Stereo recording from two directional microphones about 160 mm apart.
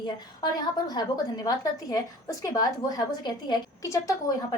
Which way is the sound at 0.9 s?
25° left (ahead or behind).